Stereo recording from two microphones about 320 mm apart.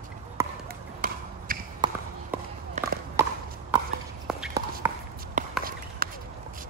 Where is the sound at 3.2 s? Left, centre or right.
Centre.